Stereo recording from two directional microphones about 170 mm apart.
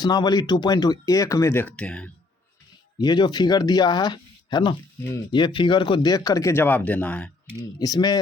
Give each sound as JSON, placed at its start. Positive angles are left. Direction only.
{"t": 0.0, "sound": "speech", "side_deg": 25}
{"t": 3.0, "sound": "speech", "side_deg": 25}
{"t": 7.8, "sound": "speech", "side_deg": 25}